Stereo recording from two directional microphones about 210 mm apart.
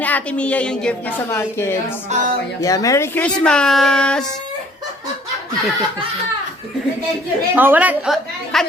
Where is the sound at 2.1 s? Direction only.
35° right (ahead or behind).